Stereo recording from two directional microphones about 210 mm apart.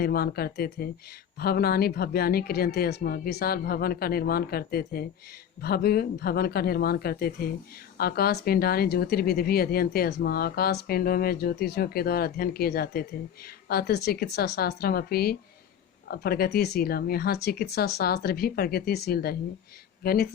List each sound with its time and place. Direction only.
0.0 s speech: 45° left (ahead or behind)